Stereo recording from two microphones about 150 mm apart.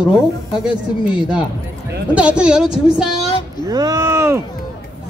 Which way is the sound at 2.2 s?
5° right (ahead or behind).